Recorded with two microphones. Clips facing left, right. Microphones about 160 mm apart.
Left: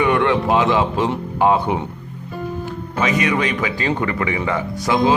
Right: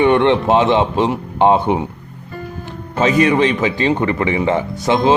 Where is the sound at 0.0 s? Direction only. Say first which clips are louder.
Right 4 dB; 25° right (ahead or behind).